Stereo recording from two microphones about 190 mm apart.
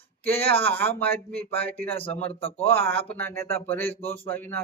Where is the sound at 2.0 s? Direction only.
30° left (ahead or behind).